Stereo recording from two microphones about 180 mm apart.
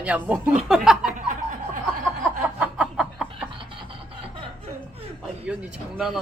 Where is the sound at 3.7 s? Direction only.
30° right (ahead or behind).